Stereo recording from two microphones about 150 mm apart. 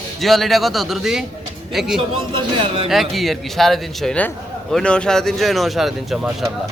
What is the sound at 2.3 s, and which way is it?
Speech, 35° right (ahead or behind).